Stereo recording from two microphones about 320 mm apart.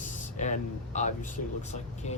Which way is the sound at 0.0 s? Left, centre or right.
Left.